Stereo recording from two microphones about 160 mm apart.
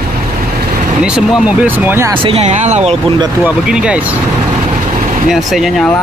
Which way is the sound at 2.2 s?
35° right (ahead or behind).